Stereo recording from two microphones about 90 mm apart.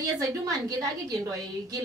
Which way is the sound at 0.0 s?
40° right (ahead or behind).